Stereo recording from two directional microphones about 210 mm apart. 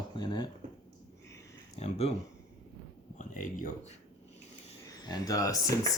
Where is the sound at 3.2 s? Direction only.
40° left (ahead or behind).